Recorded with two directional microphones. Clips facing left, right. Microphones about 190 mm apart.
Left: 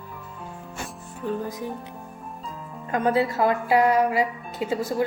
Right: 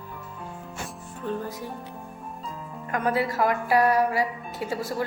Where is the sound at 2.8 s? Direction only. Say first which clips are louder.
Left 3 dB; 25° left (ahead or behind).